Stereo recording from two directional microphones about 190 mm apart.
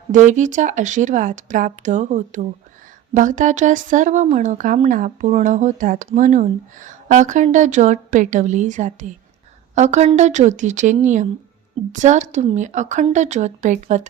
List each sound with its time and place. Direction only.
0.1 s speech: 40° right (ahead or behind)